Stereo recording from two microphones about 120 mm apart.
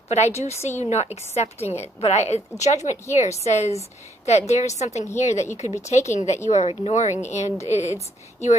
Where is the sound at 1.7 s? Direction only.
65° left (ahead or behind).